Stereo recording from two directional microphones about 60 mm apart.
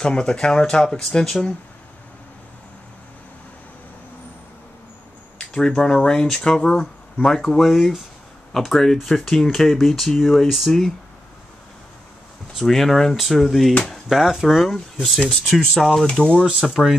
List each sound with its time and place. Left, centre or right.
0.0 s speech: centre
5.4 s a sound: centre
5.8 s speech: centre
12.5 s speech: centre
16.1 s speech: centre
16.6 s speech: centre